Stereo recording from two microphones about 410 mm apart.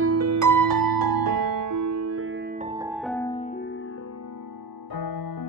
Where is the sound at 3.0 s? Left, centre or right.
Centre.